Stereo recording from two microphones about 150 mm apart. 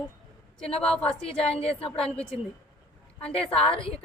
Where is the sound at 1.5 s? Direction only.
40° left (ahead or behind).